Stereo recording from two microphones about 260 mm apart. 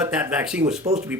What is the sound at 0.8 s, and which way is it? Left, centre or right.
Speech, right.